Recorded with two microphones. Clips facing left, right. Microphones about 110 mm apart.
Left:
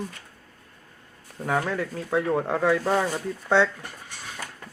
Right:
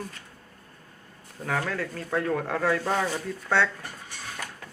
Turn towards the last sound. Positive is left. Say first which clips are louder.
# left 4 dB
turn(degrees=15)  # may be behind; listen again after turning